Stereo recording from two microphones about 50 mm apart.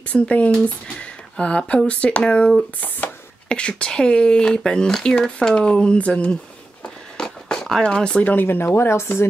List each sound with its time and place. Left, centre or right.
0.1 s speech: left
6.8 s a sound: centre
7.8 s speech: centre
8.2 s speech: left
8.5 s speech: left